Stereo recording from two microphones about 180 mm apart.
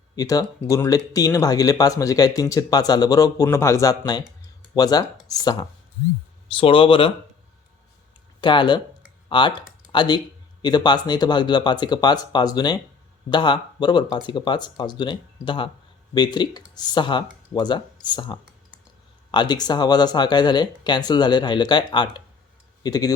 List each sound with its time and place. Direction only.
0.2 s speech: 20° left (ahead or behind)
8.4 s speech: 25° left (ahead or behind)